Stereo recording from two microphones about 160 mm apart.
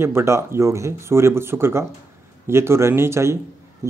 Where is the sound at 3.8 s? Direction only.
20° right (ahead or behind).